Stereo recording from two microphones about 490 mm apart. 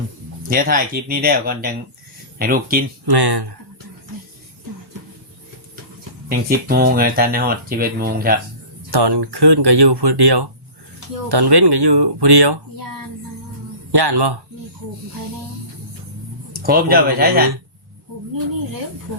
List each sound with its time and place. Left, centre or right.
0.5 s speech: centre
3.1 s speech: right
6.2 s speech: centre
8.9 s speech: right
13.9 s speech: right
16.5 s speech: centre